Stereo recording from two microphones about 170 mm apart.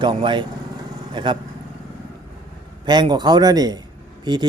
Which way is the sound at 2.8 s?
25° right (ahead or behind).